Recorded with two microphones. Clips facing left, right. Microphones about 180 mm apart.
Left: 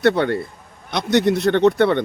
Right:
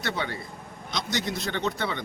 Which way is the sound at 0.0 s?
65° left (ahead or behind).